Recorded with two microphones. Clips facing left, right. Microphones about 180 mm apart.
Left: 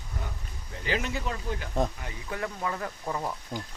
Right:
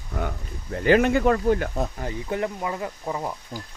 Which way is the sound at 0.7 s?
60° right (ahead or behind).